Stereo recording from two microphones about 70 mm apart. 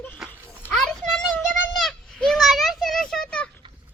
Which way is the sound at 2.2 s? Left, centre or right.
Centre.